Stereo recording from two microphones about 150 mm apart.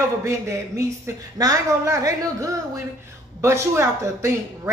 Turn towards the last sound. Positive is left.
turn(degrees=-20)  # may be behind; listen again after turning